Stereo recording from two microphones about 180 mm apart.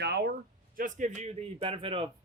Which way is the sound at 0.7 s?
45° right (ahead or behind).